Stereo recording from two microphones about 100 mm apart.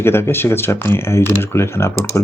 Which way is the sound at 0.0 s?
25° left (ahead or behind).